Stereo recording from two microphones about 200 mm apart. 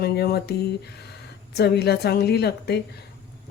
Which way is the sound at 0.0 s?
55° left (ahead or behind).